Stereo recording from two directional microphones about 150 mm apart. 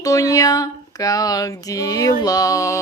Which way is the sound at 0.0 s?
20° left (ahead or behind).